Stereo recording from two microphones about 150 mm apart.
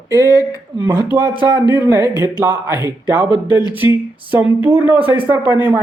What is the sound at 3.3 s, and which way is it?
Speech, 30° left (ahead or behind).